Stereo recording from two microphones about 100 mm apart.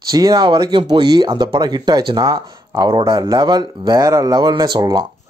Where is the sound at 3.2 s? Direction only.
45° right (ahead or behind).